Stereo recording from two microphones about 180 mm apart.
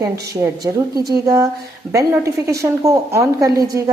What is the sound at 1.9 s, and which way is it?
A woman's voice, 10° right (ahead or behind).